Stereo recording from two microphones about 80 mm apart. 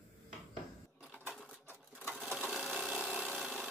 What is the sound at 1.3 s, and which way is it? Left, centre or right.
Sewing machine, left.